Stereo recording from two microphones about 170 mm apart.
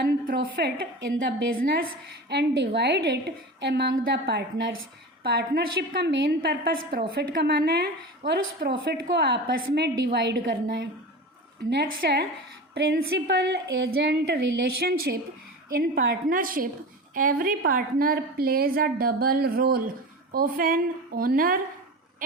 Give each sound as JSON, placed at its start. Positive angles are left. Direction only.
{"t": 0.0, "sound": "a woman's voice", "side_deg": -65}
{"t": 1.5, "sound": "a woman's voice", "side_deg": -55}
{"t": 2.3, "sound": "a woman's voice", "side_deg": -75}
{"t": 5.2, "sound": "a woman's voice", "side_deg": -75}
{"t": 12.7, "sound": "a woman's voice", "side_deg": -85}
{"t": 14.8, "sound": "a woman's voice", "side_deg": -65}